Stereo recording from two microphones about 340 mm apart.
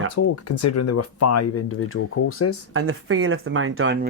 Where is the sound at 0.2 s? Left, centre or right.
Left.